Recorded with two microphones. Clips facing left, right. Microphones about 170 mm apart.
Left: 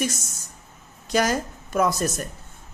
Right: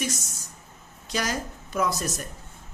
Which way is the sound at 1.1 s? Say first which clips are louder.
Left 7 dB; 50° left (ahead or behind).